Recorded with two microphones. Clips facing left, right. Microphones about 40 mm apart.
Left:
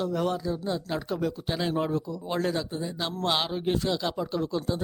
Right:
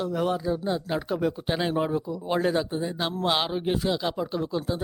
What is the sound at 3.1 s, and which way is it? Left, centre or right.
A man's voice, centre.